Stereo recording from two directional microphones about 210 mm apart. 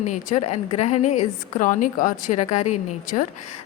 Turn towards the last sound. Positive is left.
turn(degrees=35)  # may be behind; listen again after turning